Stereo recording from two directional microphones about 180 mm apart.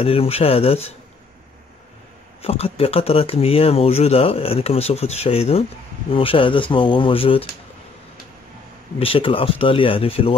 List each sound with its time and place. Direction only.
0.0 s speech: 30° left (ahead or behind)
2.4 s speech: 35° left (ahead or behind)
9.0 s speech: 30° left (ahead or behind)